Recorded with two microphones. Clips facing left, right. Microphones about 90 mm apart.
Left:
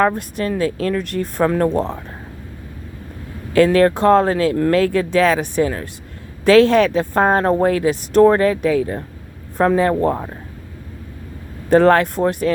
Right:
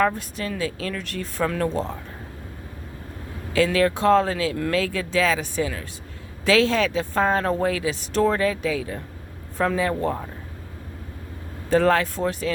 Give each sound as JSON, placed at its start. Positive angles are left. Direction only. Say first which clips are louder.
{"t": 0.0, "sound": "speech", "louder": "left 5 dB", "side_deg": 55}
{"t": 1.5, "sound": "speech", "louder": "left 7 dB", "side_deg": 40}
{"t": 1.7, "sound": "speech", "louder": "left 7 dB", "side_deg": 65}
{"t": 3.5, "sound": "speech", "louder": "left 7 dB", "side_deg": 50}
{"t": 11.7, "sound": "speech", "louder": "left 7 dB", "side_deg": 55}